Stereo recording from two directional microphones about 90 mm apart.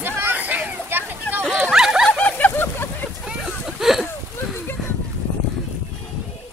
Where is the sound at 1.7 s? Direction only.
5° right (ahead or behind).